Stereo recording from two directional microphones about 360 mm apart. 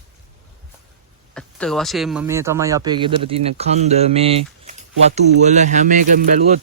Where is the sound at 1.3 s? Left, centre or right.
Centre.